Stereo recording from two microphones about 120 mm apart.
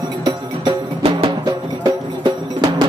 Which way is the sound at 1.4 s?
35° right (ahead or behind).